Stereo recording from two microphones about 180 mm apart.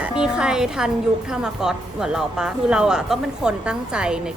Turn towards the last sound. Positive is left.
turn(degrees=-5)  # may be behind; listen again after turning